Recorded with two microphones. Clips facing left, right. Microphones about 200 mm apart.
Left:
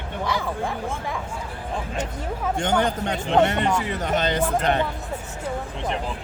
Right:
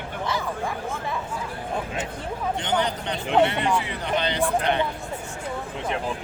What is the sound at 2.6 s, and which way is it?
A man's voice, 45° left (ahead or behind).